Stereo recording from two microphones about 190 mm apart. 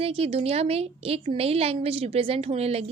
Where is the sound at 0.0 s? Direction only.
30° right (ahead or behind).